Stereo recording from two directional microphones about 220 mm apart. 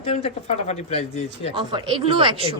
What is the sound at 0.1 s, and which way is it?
Speech, 30° left (ahead or behind).